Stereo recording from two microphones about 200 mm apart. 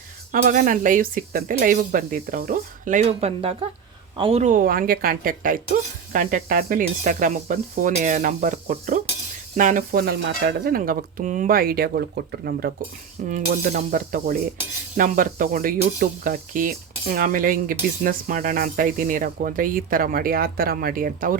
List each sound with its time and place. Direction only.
0.3 s speech: 40° right (ahead or behind)
4.2 s cutlery: 30° right (ahead or behind)
6.1 s speech: 45° right (ahead or behind)
9.6 s cutlery: 40° right (ahead or behind)
13.2 s speech: 40° right (ahead or behind)
13.7 s cutlery: 40° right (ahead or behind)